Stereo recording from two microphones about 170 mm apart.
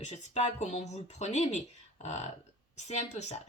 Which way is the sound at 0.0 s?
40° left (ahead or behind).